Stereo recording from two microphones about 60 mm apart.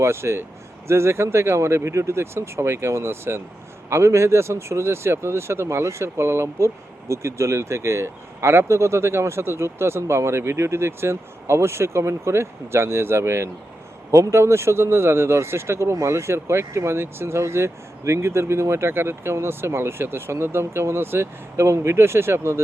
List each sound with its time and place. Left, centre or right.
0.0 s speech: right